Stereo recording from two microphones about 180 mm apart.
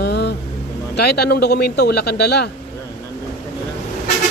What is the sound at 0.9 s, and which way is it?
Speech, 65° left (ahead or behind).